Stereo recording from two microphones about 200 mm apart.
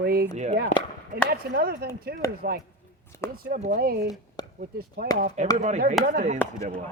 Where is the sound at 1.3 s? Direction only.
50° right (ahead or behind).